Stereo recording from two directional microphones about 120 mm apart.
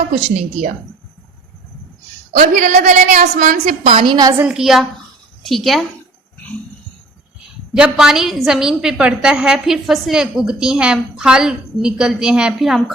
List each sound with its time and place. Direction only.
2.4 s a woman's voice: 90° right
3.9 s a woman's voice: 40° right (ahead or behind)
4.4 s a woman's voice: 5° right (ahead or behind)
7.7 s a woman's voice: 5° right (ahead or behind)